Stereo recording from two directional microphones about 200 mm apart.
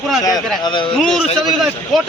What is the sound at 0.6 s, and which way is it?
Speech, 25° left (ahead or behind).